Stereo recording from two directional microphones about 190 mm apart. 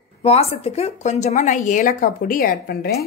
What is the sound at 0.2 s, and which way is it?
A woman's voice, 35° left (ahead or behind).